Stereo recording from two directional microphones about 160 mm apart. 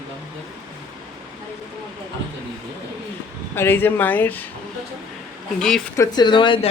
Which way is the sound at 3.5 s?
15° left (ahead or behind).